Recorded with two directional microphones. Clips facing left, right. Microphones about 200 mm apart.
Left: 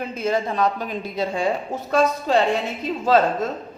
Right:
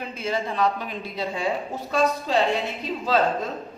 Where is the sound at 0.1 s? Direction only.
45° left (ahead or behind).